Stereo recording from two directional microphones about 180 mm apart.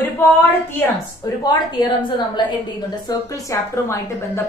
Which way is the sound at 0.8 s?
20° left (ahead or behind).